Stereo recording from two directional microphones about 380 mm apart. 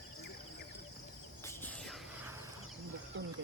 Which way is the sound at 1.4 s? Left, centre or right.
Centre.